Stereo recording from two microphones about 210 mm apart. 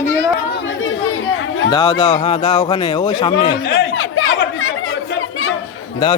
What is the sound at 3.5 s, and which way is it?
Chatter, 55° left (ahead or behind).